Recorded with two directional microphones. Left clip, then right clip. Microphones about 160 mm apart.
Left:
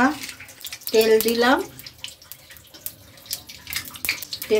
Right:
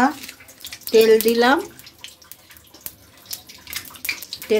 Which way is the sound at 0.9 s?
65° right (ahead or behind).